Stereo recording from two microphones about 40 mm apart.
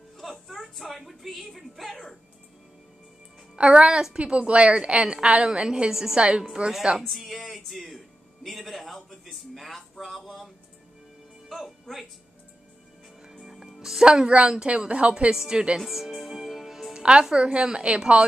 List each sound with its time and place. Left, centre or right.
0.2 s speech: centre
3.5 s a woman's voice: right
3.8 s a woman's voice: centre
4.1 s a woman's voice: right; by 6.1 s centre
6.1 s a woman's voice: right
7.0 s speech: centre
13.2 s music: centre
14.0 s a woman's voice: right
15.3 s a woman's voice: centre
15.8 s music: centre
17.0 s a woman's voice: centre